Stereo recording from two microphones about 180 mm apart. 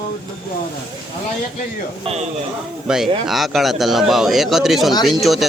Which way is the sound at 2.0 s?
35° right (ahead or behind).